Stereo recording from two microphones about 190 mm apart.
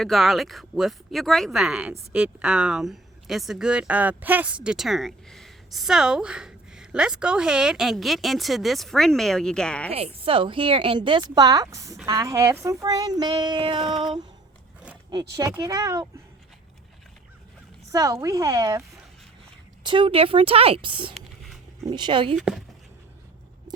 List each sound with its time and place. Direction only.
0.0 s speech: centre (ahead or behind)
9.9 s a woman's voice: 30° right (ahead or behind)
15.1 s a woman's voice: 20° right (ahead or behind)
17.9 s a woman's voice: 20° right (ahead or behind)
19.8 s a woman's voice: 25° right (ahead or behind)
21.1 s dog: centre (ahead or behind)
21.8 s a woman's voice: 25° right (ahead or behind)
22.4 s speech: centre (ahead or behind)